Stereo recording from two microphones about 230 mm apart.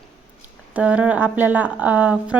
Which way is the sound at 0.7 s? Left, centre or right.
Centre.